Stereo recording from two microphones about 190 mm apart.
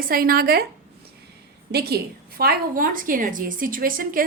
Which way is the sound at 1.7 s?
55° right (ahead or behind).